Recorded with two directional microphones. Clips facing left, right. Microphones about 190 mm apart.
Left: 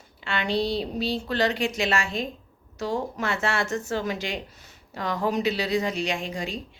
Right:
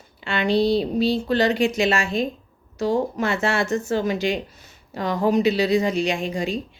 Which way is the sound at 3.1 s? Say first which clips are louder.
Right 5 dB; 25° right (ahead or behind).